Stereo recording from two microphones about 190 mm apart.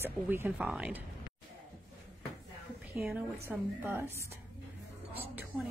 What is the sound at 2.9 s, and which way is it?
Speech, 5° right (ahead or behind).